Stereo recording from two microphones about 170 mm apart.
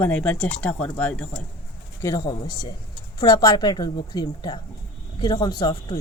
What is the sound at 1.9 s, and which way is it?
Speech, 20° left (ahead or behind).